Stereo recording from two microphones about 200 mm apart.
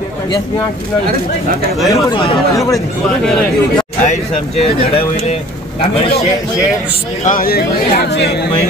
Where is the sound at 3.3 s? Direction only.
5° left (ahead or behind).